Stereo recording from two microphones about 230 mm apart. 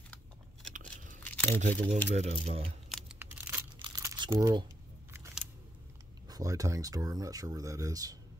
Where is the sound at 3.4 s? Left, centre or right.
Centre.